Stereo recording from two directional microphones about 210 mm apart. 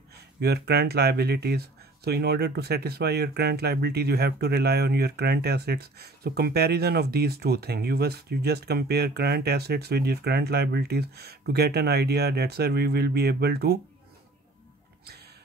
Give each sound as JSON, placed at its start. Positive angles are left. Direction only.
{"t": 0.4, "sound": "speech", "side_deg": -50}